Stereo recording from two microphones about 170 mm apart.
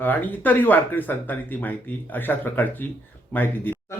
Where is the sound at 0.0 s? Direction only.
10° left (ahead or behind).